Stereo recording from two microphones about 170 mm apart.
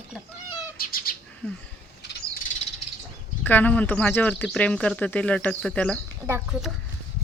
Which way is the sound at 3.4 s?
10° left (ahead or behind).